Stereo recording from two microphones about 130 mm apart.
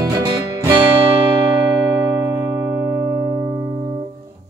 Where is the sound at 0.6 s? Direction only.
30° right (ahead or behind).